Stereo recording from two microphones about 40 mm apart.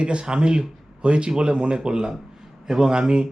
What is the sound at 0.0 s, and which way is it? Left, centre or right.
A man's voice, right.